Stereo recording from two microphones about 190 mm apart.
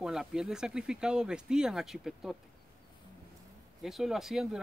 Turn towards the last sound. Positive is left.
turn(degrees=0)  # may be behind; listen again after turning